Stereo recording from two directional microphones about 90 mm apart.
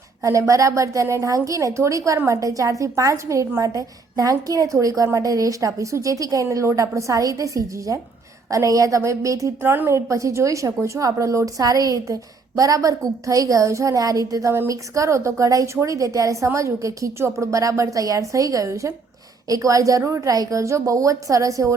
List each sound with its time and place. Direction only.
0.2 s a woman's voice: 35° right (ahead or behind)